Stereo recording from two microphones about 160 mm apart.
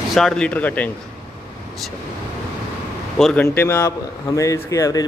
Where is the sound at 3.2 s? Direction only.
5° left (ahead or behind).